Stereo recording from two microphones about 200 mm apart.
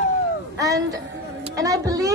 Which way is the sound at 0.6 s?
15° right (ahead or behind).